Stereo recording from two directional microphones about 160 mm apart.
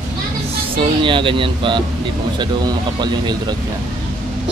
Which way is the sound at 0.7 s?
30° right (ahead or behind).